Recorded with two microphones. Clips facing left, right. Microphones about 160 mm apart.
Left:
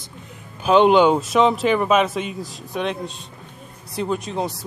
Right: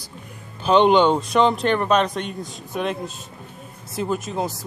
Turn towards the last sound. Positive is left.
turn(degrees=0)  # may be behind; listen again after turning